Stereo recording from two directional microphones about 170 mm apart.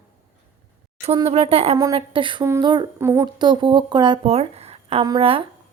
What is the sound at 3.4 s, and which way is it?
A woman's voice, 25° right (ahead or behind).